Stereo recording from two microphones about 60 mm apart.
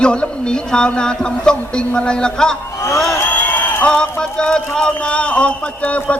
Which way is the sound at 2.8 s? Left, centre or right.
Left.